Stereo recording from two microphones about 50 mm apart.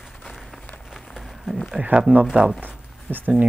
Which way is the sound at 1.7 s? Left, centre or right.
Right.